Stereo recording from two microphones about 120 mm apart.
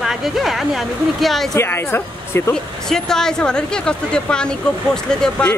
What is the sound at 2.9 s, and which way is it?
Speech, 5° left (ahead or behind).